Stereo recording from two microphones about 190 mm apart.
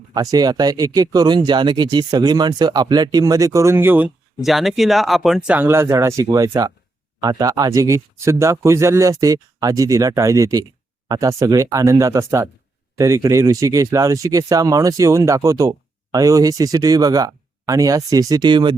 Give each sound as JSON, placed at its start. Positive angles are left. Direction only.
{"t": 0.1, "sound": "speech", "side_deg": -20}